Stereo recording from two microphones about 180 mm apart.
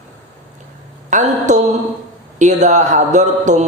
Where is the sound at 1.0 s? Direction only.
40° right (ahead or behind).